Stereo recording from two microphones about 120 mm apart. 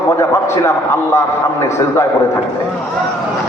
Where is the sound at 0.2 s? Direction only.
20° left (ahead or behind).